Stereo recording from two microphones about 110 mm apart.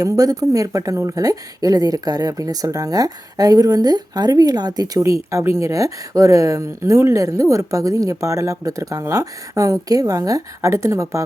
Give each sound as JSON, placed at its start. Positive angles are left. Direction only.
{"t": 0.0, "sound": "speech", "side_deg": -35}